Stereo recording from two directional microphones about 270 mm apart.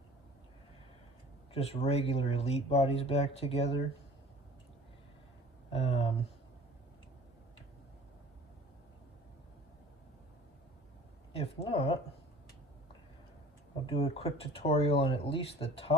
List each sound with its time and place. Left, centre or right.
1.5 s speech: left
5.7 s a sound: left
11.3 s speech: left
13.8 s speech: left